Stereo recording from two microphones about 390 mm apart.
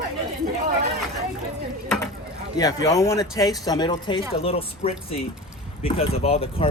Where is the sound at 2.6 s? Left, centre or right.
Centre.